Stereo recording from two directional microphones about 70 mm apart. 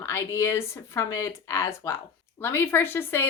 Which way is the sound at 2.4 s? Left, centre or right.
Left.